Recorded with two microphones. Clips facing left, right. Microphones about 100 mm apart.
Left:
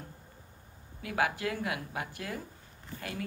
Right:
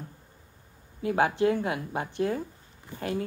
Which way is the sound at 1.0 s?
30° right (ahead or behind).